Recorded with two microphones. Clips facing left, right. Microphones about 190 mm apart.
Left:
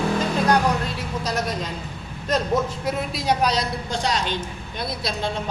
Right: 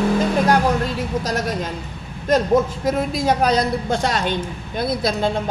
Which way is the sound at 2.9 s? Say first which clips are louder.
Right 5 dB; 45° right (ahead or behind).